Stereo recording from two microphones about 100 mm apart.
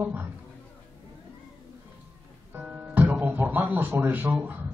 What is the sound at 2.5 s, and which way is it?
Speech, 15° right (ahead or behind).